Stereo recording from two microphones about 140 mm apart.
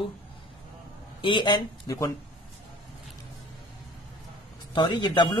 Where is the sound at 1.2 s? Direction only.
35° left (ahead or behind).